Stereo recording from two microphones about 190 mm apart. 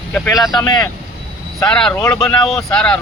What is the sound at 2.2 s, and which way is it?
Speech, 25° left (ahead or behind).